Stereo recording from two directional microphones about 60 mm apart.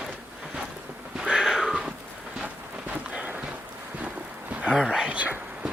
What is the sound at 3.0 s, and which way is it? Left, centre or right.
Run, centre.